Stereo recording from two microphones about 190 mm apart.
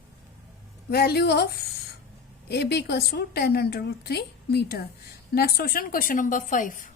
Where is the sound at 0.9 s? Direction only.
55° left (ahead or behind).